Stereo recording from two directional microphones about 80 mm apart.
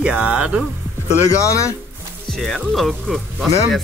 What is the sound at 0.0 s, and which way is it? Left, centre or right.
Speech, centre.